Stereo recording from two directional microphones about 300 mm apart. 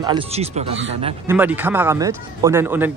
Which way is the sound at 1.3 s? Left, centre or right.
Centre.